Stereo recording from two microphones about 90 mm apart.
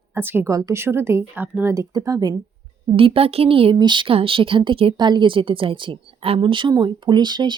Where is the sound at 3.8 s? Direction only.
60° right (ahead or behind); by 5.0 s 80° right.